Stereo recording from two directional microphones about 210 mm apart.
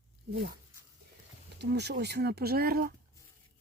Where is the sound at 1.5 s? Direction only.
55° right (ahead or behind).